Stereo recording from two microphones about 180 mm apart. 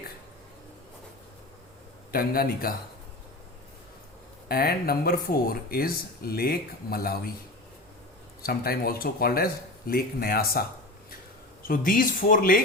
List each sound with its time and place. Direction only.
2.1 s speech: 55° left (ahead or behind)
4.4 s speech: 55° left (ahead or behind)
8.4 s speech: 55° left (ahead or behind)
11.7 s speech: 50° left (ahead or behind)